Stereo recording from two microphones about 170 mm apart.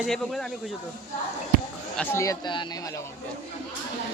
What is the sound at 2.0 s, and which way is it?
Speech, 15° left (ahead or behind).